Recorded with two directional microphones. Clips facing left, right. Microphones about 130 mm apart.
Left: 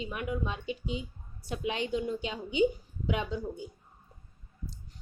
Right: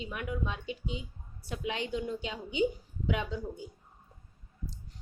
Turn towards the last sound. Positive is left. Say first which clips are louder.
# left 1 dB
turn(degrees=20)  # may be behind; listen again after turning